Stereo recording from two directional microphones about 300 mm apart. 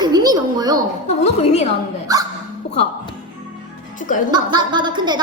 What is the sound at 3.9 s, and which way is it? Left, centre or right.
Speech, left.